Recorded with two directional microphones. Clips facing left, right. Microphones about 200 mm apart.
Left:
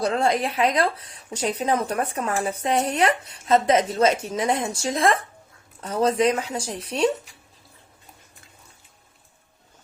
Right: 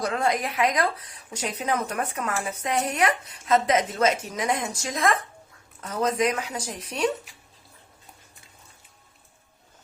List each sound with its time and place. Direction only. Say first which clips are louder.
0.0 s speech: left 3 dB; 30° left (ahead or behind)